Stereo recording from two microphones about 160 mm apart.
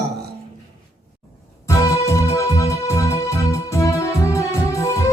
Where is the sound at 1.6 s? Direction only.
20° left (ahead or behind).